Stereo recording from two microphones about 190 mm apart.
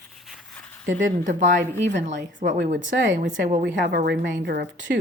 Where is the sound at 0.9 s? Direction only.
40° right (ahead or behind).